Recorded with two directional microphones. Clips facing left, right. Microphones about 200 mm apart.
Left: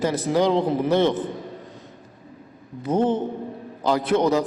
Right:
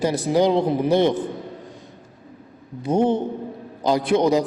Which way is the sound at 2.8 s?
15° right (ahead or behind).